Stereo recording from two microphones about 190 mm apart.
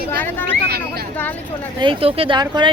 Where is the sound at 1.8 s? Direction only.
25° right (ahead or behind).